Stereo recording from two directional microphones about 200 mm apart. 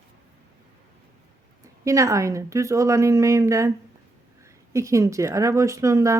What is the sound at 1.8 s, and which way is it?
Speech, 15° right (ahead or behind).